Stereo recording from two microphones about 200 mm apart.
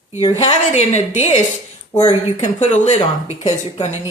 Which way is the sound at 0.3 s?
35° left (ahead or behind).